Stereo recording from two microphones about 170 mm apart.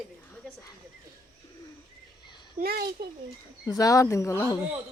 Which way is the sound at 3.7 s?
20° left (ahead or behind).